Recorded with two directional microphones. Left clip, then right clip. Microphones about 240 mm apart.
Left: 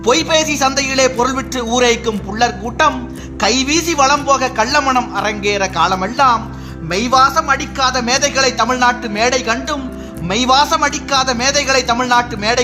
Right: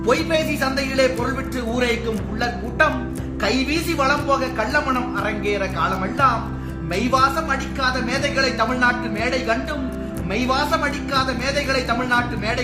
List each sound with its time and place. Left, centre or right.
0.0 s a man's voice: left